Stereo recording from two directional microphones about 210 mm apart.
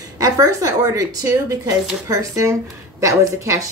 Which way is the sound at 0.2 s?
15° right (ahead or behind).